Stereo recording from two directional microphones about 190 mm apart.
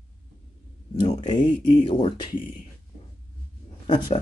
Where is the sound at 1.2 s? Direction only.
25° left (ahead or behind).